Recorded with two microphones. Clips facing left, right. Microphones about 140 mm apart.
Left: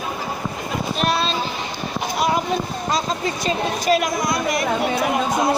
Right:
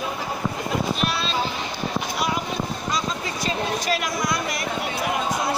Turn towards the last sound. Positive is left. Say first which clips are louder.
# left 4 dB
turn(degrees=20)  # may be behind; listen again after turning